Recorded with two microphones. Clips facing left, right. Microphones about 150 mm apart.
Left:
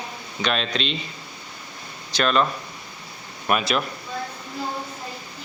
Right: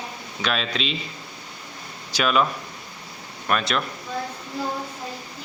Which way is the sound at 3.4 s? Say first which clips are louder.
Left 2 dB; 5° left (ahead or behind).